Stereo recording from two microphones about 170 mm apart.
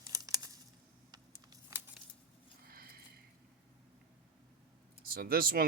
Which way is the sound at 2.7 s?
60° right (ahead or behind).